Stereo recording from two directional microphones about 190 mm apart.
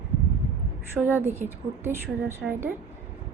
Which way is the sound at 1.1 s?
10° right (ahead or behind).